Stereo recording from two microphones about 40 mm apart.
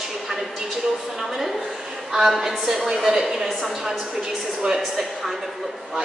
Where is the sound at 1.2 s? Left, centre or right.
Centre.